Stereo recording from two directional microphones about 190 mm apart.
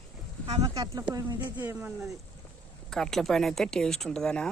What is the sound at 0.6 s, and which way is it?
Speech, 20° right (ahead or behind).